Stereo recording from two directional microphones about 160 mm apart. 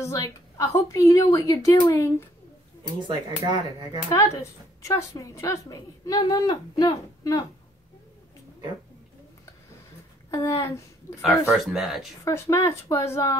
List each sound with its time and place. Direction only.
0.0 s a woman's voice: 20° left (ahead or behind)
3.0 s speech: 30° right (ahead or behind)
4.1 s a woman's voice: 20° left (ahead or behind)
10.3 s a woman's voice: 20° left (ahead or behind)
11.5 s speech: centre (ahead or behind)
12.3 s speech: 20° left (ahead or behind)